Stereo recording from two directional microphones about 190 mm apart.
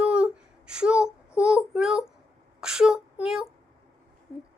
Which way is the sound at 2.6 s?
5° right (ahead or behind).